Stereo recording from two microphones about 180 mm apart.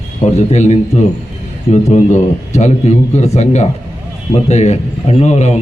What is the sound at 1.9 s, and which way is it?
A man's voice, 40° left (ahead or behind).